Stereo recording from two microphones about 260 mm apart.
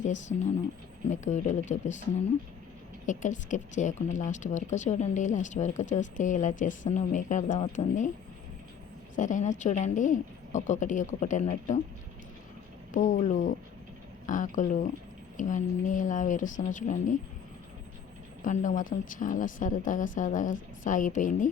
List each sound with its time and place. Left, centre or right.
0.0 s a woman's voice: left
9.1 s a woman's voice: left
12.9 s a woman's voice: left
18.4 s a woman's voice: left